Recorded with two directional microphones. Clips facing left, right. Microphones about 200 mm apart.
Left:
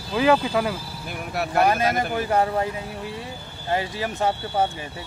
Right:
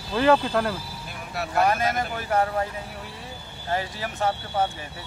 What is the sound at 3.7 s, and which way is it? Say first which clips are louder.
Speech: left 3 dB; 15° left (ahead or behind).